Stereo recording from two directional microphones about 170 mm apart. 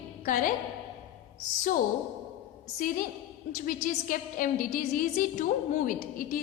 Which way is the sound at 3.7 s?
55° left (ahead or behind).